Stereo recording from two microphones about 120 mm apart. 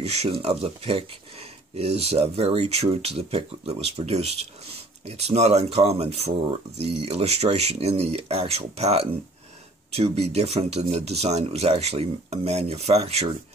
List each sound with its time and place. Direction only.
0.0 s speech: 65° right (ahead or behind)